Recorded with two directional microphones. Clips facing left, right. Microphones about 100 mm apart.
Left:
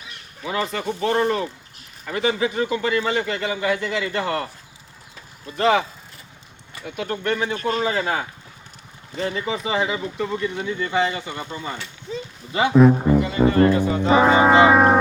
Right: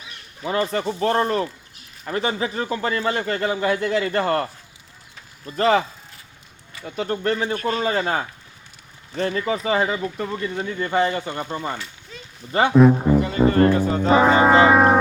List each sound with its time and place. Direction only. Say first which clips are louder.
0.4 s speech: right 2 dB; 40° right (ahead or behind)
5.5 s speech: even; 45° right (ahead or behind)
6.8 s speech: right 2 dB; 40° right (ahead or behind)
12.7 s music: left 1 dB; centre (ahead or behind)
13.4 s music: even; 15° left (ahead or behind)
13.7 s music: even; 40° right (ahead or behind)
14.1 s foghorn: even; centre (ahead or behind)